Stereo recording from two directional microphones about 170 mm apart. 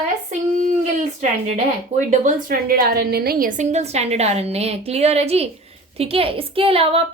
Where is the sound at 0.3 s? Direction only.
50° right (ahead or behind).